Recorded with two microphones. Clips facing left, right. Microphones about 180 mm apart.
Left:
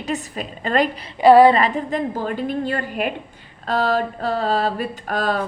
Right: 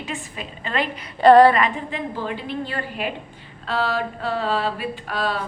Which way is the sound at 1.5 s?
40° left (ahead or behind).